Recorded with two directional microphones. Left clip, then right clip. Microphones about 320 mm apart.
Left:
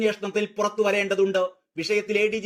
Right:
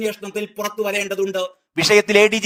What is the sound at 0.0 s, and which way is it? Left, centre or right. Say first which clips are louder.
Speech: even; centre.